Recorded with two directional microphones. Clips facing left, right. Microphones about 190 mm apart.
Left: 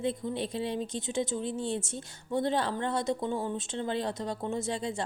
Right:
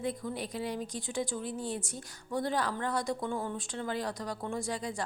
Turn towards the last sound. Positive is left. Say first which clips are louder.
# left 3 dB
turn(degrees=25)  # may be behind; listen again after turning